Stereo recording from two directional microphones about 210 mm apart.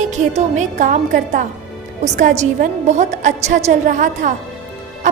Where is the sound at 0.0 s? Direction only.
35° right (ahead or behind).